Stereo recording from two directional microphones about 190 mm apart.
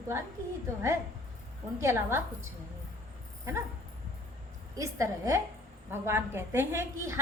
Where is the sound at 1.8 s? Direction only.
15° right (ahead or behind).